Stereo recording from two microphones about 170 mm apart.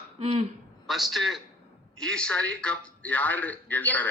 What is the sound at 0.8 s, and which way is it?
A man's voice, centre (ahead or behind).